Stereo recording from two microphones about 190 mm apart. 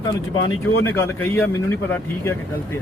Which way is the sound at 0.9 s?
10° left (ahead or behind).